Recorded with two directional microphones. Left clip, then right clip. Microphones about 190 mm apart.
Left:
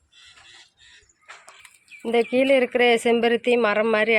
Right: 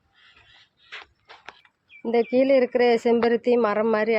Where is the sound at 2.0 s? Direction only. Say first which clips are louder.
Left 1 dB; 5° left (ahead or behind).